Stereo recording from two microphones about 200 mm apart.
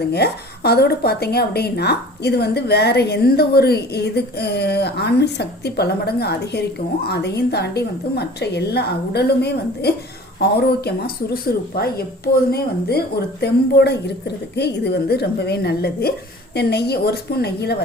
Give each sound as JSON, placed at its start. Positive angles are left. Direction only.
{"t": 0.1, "sound": "a woman's voice", "side_deg": 55}